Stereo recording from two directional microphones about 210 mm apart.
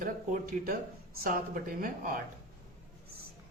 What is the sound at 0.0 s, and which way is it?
A woman's voice, 40° right (ahead or behind).